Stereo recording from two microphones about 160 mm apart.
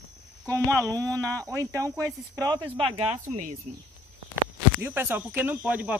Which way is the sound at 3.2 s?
50° right (ahead or behind).